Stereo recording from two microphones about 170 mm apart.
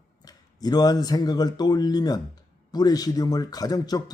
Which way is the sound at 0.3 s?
25° left (ahead or behind).